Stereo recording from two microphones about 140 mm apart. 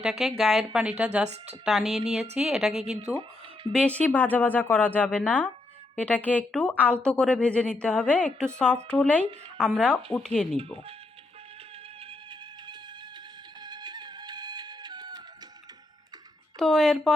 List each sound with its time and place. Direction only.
0.0 s a woman's voice: centre (ahead or behind)
2.8 s speech: 50° right (ahead or behind)
3.8 s a woman's voice: 10° left (ahead or behind)
13.6 s music: 30° right (ahead or behind)
16.6 s a woman's voice: 5° left (ahead or behind)